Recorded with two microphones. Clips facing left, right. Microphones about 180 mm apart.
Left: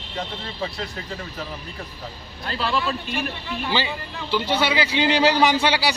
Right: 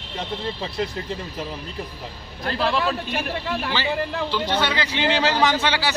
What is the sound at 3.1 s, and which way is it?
Speech, 75° right (ahead or behind).